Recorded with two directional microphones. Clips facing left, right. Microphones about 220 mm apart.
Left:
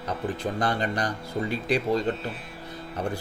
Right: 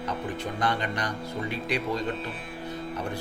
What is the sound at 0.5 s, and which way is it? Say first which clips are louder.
Speech: even; 35° left (ahead or behind).